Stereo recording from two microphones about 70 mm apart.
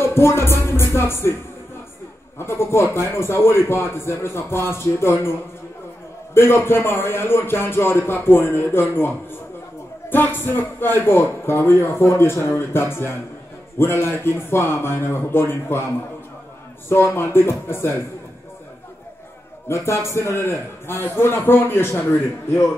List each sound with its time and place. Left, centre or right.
0.0 s a man's voice: left
2.3 s a man's voice: left
6.3 s a man's voice: left
16.9 s a man's voice: left
19.7 s a man's voice: left